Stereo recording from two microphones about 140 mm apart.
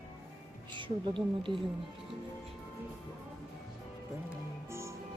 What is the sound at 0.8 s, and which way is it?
Speech, 35° right (ahead or behind).